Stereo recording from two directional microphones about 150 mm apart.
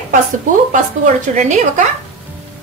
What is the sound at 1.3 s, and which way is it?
Speech, 55° right (ahead or behind).